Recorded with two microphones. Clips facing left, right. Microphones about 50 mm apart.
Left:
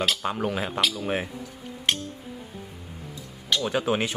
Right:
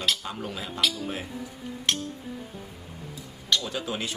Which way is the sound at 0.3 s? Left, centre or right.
Left.